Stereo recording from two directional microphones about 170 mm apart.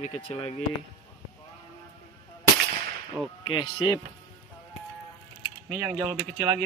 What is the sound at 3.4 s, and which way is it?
Speech, 25° left (ahead or behind).